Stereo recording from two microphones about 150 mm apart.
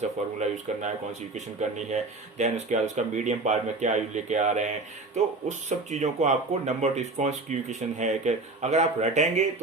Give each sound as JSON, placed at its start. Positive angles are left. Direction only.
{"t": 0.0, "sound": "speech", "side_deg": -50}